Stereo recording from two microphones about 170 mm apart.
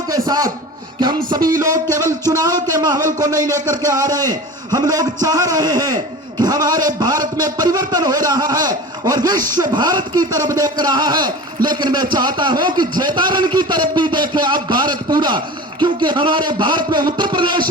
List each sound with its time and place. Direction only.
0.1 s a man's voice: 20° right (ahead or behind)